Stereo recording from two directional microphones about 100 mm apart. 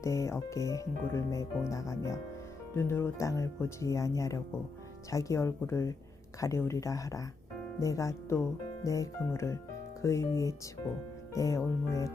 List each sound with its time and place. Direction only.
0.0 s speech: 30° left (ahead or behind)